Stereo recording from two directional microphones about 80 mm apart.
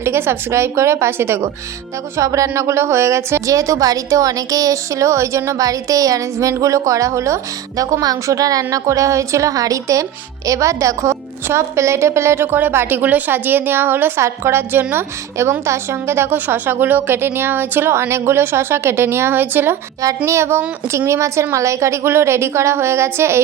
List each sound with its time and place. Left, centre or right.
0.0 s a woman's voice: right
20.0 s a woman's voice: right